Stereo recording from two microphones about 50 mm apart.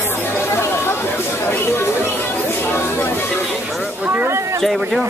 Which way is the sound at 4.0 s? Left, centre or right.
Right.